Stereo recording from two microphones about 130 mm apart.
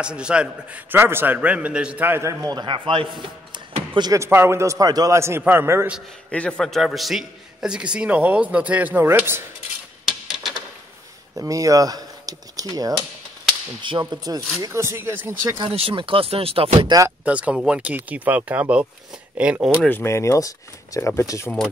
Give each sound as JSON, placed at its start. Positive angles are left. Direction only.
{"t": 0.0, "sound": "a man's voice", "side_deg": -10}
{"t": 4.2, "sound": "a man's voice", "side_deg": -20}
{"t": 6.3, "sound": "a man's voice", "side_deg": 10}
{"t": 10.0, "sound": "a sound", "side_deg": -5}
{"t": 11.3, "sound": "speech", "side_deg": -25}
{"t": 13.7, "sound": "whip", "side_deg": -35}
{"t": 14.6, "sound": "a man's voice", "side_deg": -20}
{"t": 15.4, "sound": "whip", "side_deg": -30}
{"t": 15.7, "sound": "speech", "side_deg": -45}
{"t": 17.2, "sound": "a man's voice", "side_deg": -10}
{"t": 19.8, "sound": "speech", "side_deg": 15}